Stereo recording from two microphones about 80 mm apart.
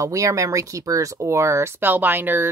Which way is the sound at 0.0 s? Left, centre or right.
Right.